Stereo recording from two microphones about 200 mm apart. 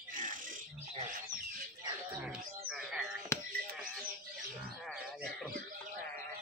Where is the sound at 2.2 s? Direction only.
5° right (ahead or behind).